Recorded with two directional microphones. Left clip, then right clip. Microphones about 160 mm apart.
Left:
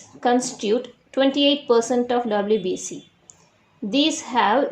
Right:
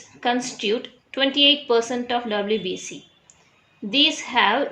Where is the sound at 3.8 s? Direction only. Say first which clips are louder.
Right 2 dB; 45° left (ahead or behind).